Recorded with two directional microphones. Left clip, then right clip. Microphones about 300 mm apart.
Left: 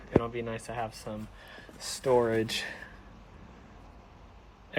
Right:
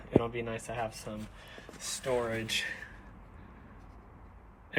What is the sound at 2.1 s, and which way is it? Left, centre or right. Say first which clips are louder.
Speech: left 6 dB; centre.